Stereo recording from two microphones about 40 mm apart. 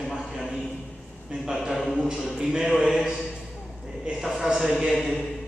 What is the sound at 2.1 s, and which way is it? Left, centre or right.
Speech, centre.